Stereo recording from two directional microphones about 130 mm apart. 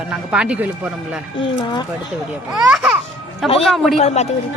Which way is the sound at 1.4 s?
35° left (ahead or behind).